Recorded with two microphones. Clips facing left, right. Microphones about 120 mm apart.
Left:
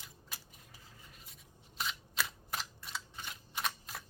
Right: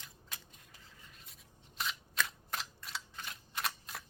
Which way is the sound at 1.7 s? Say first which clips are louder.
Right 1 dB; centre (ahead or behind).